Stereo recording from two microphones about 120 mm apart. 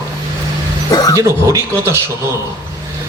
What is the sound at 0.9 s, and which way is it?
Speech, 30° left (ahead or behind).